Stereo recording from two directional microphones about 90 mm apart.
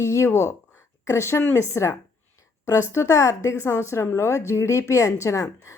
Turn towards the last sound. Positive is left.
turn(degrees=35)  # may be behind; listen again after turning